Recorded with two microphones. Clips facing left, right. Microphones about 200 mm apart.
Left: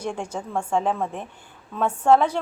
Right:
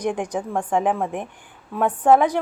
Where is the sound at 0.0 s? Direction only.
15° right (ahead or behind).